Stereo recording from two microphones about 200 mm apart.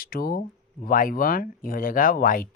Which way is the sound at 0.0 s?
50° left (ahead or behind).